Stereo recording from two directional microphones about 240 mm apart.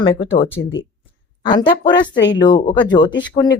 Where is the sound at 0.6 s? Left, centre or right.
Left.